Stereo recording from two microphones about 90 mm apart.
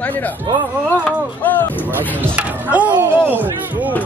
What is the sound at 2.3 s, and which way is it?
Speech, 20° right (ahead or behind).